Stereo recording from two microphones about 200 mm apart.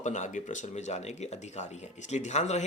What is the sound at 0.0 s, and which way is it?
Speech, 35° left (ahead or behind).